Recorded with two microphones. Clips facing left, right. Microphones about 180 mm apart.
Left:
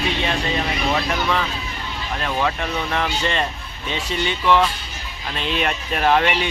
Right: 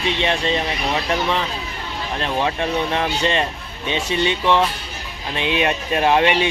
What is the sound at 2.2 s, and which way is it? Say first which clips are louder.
Speech: right 2 dB; 25° right (ahead or behind).